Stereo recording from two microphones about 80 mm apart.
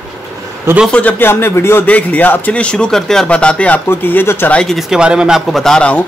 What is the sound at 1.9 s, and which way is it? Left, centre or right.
Speech, centre.